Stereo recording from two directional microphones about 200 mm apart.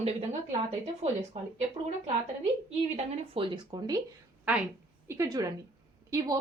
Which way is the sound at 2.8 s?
30° right (ahead or behind).